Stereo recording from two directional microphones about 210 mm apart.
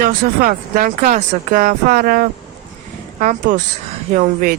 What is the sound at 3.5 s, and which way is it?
Speech, 40° right (ahead or behind).